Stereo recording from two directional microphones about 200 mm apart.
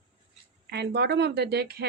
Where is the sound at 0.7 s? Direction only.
55° right (ahead or behind).